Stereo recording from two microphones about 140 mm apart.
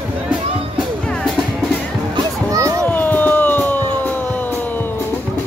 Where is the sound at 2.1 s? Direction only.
25° right (ahead or behind).